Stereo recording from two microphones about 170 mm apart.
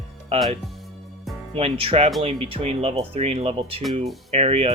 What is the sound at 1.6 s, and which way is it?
Speech, 35° right (ahead or behind).